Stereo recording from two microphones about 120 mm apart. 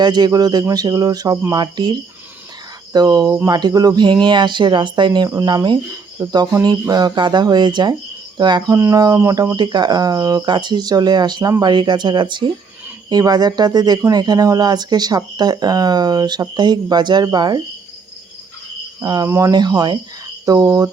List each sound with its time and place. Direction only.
0.0 s speech: 35° right (ahead or behind)
19.0 s speech: 30° right (ahead or behind)